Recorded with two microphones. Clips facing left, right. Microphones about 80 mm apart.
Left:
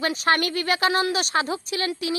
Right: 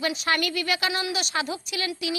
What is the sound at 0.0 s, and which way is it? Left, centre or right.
A woman's voice, left.